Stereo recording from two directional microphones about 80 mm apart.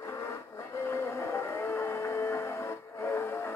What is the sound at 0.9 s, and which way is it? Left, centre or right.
Music, left.